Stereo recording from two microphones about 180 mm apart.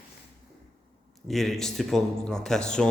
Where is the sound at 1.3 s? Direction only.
Centre (ahead or behind).